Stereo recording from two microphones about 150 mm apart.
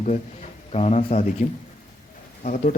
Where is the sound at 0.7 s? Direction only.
45° left (ahead or behind).